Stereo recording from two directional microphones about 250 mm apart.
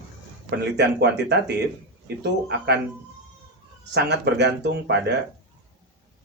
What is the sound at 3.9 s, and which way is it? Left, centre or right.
Speech, right.